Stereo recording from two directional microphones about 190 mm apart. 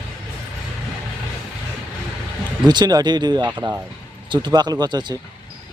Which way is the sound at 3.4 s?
10° right (ahead or behind).